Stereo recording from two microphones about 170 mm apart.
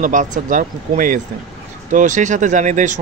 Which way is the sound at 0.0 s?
50° right (ahead or behind).